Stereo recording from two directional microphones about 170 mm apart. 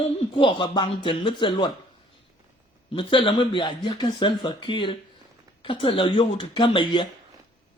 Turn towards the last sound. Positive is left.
turn(degrees=30)  # may be behind; listen again after turning